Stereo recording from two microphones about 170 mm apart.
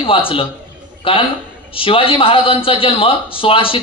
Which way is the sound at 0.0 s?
30° left (ahead or behind).